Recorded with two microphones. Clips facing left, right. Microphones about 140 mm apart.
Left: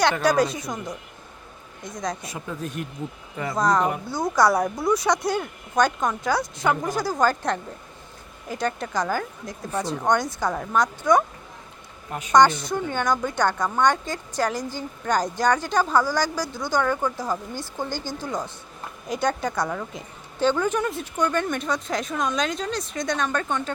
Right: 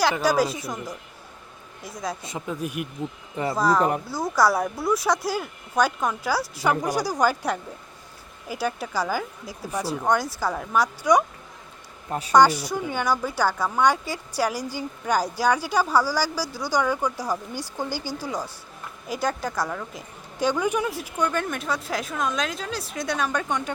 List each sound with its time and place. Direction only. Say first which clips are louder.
0.0 s speech: left 1 dB; centre (ahead or behind)
2.2 s a woman's voice: right 2 dB; 20° right (ahead or behind)
12.3 s a woman's voice: even; 10° right (ahead or behind)
20.4 s a woman's voice: left 1 dB; 10° right (ahead or behind)